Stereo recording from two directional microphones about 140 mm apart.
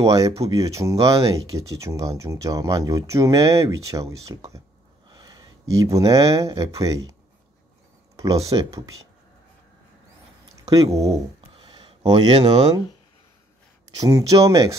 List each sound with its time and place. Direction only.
0.0 s speech: 25° right (ahead or behind)
8.2 s speech: 25° right (ahead or behind)
10.6 s speech: 25° right (ahead or behind)
11.6 s a sound: 35° right (ahead or behind)
12.1 s speech: 35° right (ahead or behind)
13.9 s speech: 25° right (ahead or behind)